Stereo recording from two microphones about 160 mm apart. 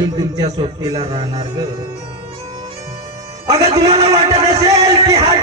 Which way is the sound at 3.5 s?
20° right (ahead or behind).